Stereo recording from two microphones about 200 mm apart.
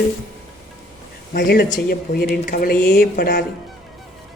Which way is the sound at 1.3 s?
55° left (ahead or behind).